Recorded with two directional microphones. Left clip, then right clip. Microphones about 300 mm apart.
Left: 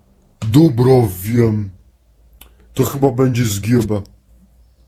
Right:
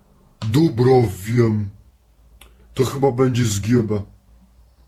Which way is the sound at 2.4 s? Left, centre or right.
Centre.